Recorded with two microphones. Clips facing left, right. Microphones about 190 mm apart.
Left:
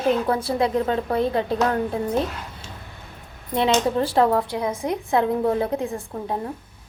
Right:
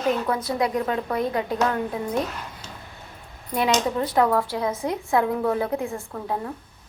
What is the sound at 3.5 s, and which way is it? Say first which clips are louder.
Speech: left 2 dB; 25° left (ahead or behind).